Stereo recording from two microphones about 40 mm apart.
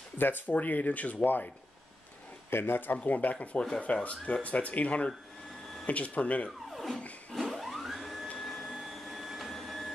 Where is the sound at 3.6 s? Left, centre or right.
Left.